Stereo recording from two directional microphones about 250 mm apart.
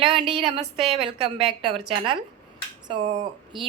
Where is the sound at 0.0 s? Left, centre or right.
Centre.